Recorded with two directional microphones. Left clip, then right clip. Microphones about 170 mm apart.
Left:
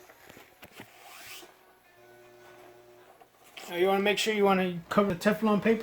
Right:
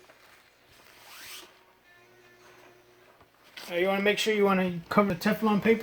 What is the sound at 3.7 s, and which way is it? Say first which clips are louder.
Speech: even; 30° right (ahead or behind).